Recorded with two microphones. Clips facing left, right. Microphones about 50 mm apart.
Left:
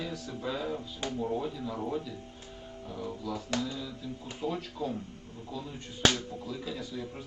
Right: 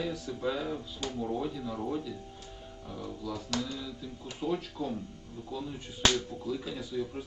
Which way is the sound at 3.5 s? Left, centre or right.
Left.